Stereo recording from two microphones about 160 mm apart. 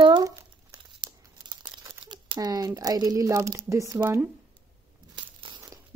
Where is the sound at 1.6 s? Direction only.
25° right (ahead or behind).